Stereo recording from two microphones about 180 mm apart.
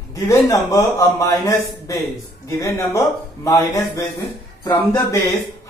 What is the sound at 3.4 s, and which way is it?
Speech, 20° left (ahead or behind).